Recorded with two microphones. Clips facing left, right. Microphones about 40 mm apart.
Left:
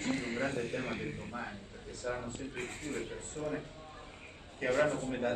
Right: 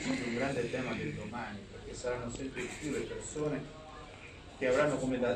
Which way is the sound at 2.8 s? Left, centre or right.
Left.